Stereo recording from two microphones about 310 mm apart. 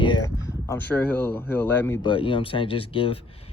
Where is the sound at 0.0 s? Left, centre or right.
Centre.